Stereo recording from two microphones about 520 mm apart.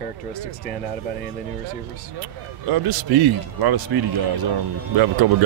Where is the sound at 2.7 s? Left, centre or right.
Right.